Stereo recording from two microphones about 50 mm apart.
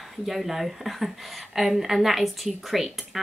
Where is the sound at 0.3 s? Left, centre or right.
Centre.